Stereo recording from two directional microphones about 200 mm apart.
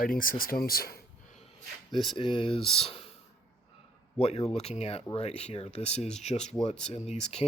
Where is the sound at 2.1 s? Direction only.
25° left (ahead or behind).